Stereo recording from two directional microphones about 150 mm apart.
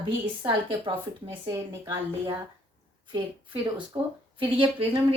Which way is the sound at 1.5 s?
25° right (ahead or behind).